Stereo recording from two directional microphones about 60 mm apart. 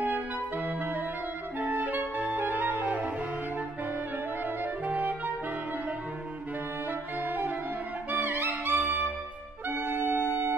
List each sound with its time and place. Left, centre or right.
0.7 s music: right
4.8 s clarinet: right
6.9 s music: right